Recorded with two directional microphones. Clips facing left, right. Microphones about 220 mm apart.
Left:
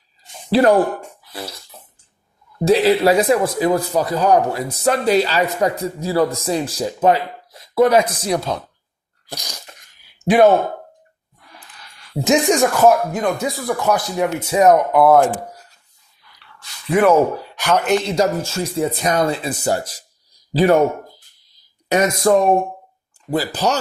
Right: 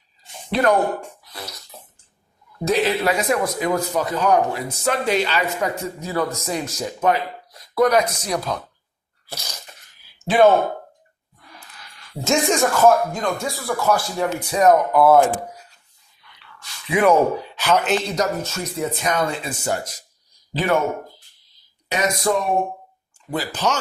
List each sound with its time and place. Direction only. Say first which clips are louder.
0.5 s speech: left 5 dB; 30° left (ahead or behind)
1.4 s bathtub: left 5 dB; 30° left (ahead or behind)
2.6 s speech: left 6 dB; 35° left (ahead or behind)
9.2 s sneeze: left 2 dB; 15° left (ahead or behind)
12.2 s speech: left 4 dB; 15° left (ahead or behind)
14.6 s speech: left 2 dB; centre (ahead or behind)
16.9 s speech: left 2 dB; 5° left (ahead or behind)
18.1 s speech: left 5 dB; 30° left (ahead or behind)
21.8 s speech: left 6 dB; 45° left (ahead or behind)
23.3 s speech: left 4 dB; 35° left (ahead or behind)